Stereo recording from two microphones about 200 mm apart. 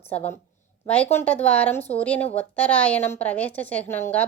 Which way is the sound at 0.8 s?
5° left (ahead or behind).